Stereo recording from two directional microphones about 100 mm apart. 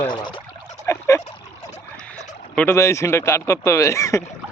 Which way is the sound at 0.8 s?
30° left (ahead or behind).